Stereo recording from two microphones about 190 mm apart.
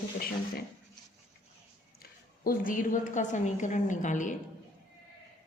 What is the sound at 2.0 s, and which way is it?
A woman's voice, 50° left (ahead or behind).